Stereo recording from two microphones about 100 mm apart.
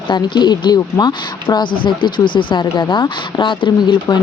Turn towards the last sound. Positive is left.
turn(degrees=45)  # may be behind; listen again after turning